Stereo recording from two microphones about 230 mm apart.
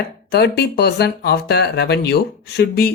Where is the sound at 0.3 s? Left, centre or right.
Left.